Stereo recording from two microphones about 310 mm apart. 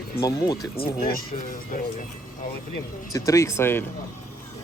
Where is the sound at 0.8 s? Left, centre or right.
Left.